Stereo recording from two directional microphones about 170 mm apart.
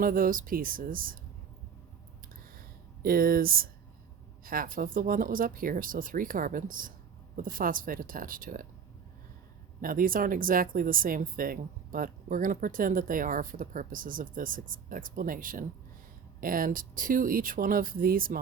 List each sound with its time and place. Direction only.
0.0 s speech: 55° right (ahead or behind)
2.3 s a sound: 60° right (ahead or behind)
4.4 s speech: 55° right (ahead or behind)
9.8 s speech: 55° right (ahead or behind)